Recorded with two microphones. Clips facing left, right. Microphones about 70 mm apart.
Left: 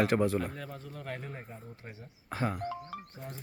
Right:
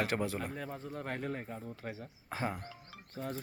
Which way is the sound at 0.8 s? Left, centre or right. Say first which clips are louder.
Right 2 dB; right.